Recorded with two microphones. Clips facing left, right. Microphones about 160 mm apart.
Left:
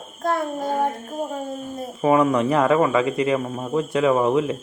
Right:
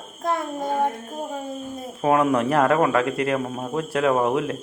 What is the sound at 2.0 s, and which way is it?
Speech, centre (ahead or behind).